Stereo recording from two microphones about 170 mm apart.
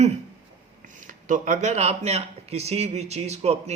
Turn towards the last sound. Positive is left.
turn(degrees=-40)  # may be behind; listen again after turning